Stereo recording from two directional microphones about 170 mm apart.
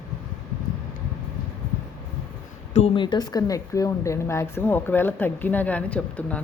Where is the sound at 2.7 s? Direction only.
35° left (ahead or behind); by 6.4 s 10° left (ahead or behind).